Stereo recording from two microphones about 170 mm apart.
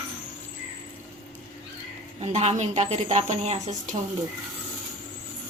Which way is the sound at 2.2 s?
40° right (ahead or behind).